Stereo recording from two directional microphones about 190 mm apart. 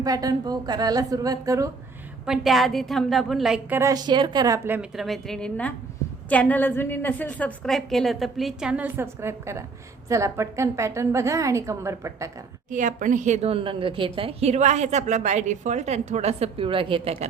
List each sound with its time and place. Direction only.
0.0 s a woman's voice: 20° right (ahead or behind)
2.2 s a woman's voice: centre (ahead or behind)
12.7 s a woman's voice: 40° right (ahead or behind)